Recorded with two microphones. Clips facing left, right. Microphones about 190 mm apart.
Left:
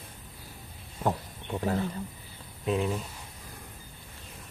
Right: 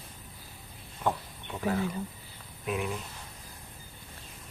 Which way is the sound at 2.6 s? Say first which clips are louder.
Left 4 dB; 25° left (ahead or behind).